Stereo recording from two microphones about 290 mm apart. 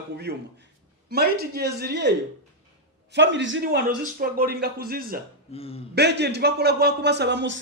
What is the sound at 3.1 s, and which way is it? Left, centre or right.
A man's voice, right.